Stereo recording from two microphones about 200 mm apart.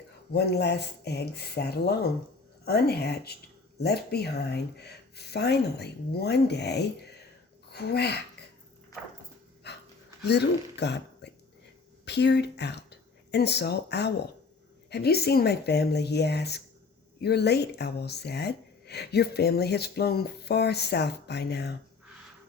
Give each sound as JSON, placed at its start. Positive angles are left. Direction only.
{"t": 0.3, "sound": "speech", "side_deg": 55}
{"t": 9.7, "sound": "pant", "side_deg": 55}
{"t": 10.2, "sound": "speech", "side_deg": 55}